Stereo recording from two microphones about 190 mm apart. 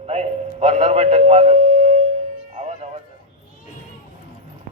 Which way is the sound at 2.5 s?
35° right (ahead or behind).